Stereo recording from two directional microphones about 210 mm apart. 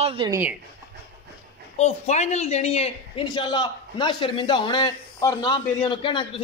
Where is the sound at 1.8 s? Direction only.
30° left (ahead or behind).